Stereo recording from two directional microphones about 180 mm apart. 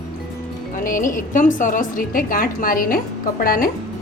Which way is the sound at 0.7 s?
50° left (ahead or behind).